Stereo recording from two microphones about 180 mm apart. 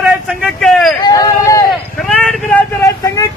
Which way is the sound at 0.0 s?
5° right (ahead or behind).